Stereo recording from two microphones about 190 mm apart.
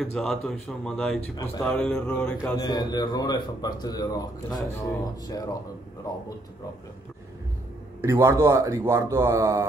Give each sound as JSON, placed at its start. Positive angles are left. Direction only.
{"t": 0.0, "sound": "speech", "side_deg": 0}
{"t": 2.5, "sound": "a man's voice", "side_deg": 20}
{"t": 8.0, "sound": "speech", "side_deg": -15}